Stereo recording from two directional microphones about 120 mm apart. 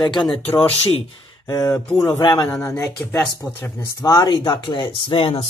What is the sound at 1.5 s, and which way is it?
Speech, 30° left (ahead or behind).